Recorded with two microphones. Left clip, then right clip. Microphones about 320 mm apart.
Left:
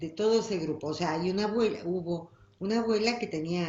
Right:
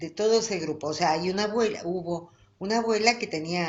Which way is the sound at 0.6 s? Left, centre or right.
Right.